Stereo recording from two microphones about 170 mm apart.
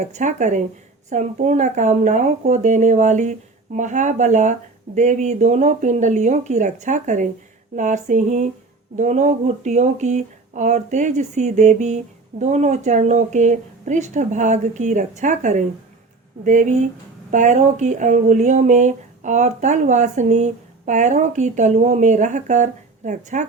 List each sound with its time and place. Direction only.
0.0 s speech: 45° right (ahead or behind)